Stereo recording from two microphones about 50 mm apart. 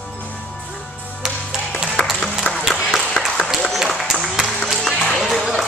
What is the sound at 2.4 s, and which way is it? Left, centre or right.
Ping, left.